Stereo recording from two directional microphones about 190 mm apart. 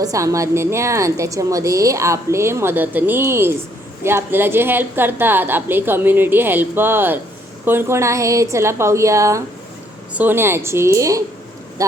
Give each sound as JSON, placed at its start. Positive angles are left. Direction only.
{"t": 0.0, "sound": "a woman's voice", "side_deg": -15}